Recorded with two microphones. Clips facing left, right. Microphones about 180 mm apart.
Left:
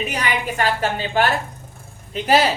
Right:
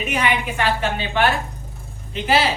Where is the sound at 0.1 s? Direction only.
40° left (ahead or behind).